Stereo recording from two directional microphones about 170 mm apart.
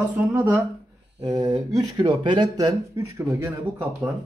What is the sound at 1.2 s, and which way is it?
Speech, 25° right (ahead or behind).